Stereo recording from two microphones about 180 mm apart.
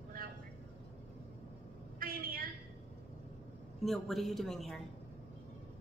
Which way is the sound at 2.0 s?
55° right (ahead or behind).